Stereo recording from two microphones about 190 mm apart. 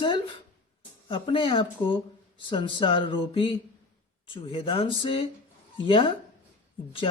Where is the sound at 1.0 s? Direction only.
25° left (ahead or behind).